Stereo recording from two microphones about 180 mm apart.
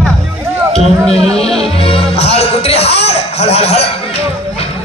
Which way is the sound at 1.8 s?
30° left (ahead or behind).